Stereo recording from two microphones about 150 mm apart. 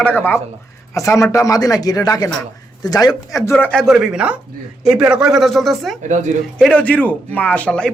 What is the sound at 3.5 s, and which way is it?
Speech, 5° left (ahead or behind).